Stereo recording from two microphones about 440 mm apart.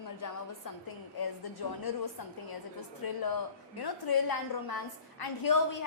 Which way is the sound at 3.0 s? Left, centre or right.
Left.